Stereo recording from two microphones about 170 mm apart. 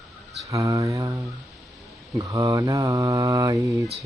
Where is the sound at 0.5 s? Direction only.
20° right (ahead or behind).